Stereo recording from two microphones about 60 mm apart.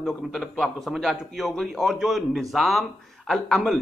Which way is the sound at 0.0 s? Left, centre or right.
Centre.